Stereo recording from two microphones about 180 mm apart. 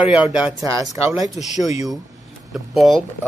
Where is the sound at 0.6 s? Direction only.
20° right (ahead or behind).